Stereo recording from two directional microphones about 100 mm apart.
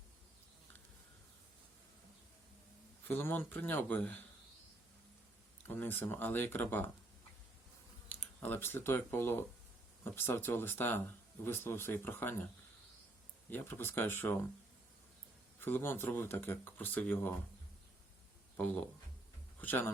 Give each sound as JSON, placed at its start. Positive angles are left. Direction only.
{"t": 3.0, "sound": "speech", "side_deg": 20}
{"t": 5.6, "sound": "speech", "side_deg": 20}
{"t": 8.1, "sound": "speech", "side_deg": 15}
{"t": 13.5, "sound": "speech", "side_deg": 20}
{"t": 15.6, "sound": "speech", "side_deg": 25}
{"t": 18.5, "sound": "speech", "side_deg": 15}